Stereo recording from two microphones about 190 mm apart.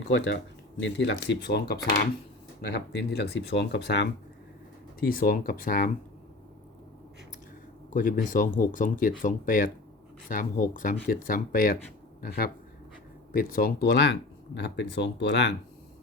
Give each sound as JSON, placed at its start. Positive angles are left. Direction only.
{"t": 0.0, "sound": "speech", "side_deg": 65}
{"t": 4.9, "sound": "speech", "side_deg": 50}
{"t": 7.9, "sound": "speech", "side_deg": 45}
{"t": 13.3, "sound": "speech", "side_deg": 50}